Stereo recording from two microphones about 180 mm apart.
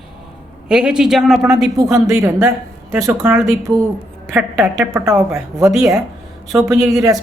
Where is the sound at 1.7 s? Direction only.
20° right (ahead or behind).